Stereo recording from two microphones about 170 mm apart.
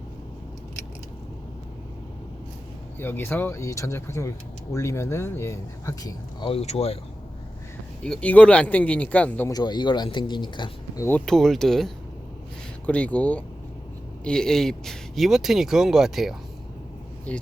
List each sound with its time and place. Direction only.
3.0 s speech: 10° left (ahead or behind)
6.5 s speech: 40° left (ahead or behind)
8.0 s speech: 5° left (ahead or behind)
9.5 s speech: 25° left (ahead or behind)
11.3 s speech: centre (ahead or behind)